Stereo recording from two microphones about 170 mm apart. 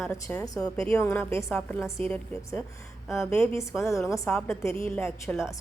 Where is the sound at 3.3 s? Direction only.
15° left (ahead or behind).